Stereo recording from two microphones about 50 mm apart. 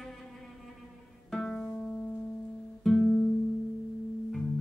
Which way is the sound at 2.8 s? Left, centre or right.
Centre.